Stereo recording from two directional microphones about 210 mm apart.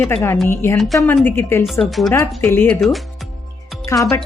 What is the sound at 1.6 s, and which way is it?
Speech, centre (ahead or behind).